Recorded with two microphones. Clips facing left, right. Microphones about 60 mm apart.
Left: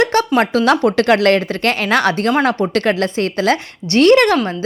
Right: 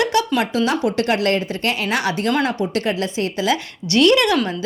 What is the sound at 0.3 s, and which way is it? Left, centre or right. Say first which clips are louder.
A woman's voice: left 6 dB; left.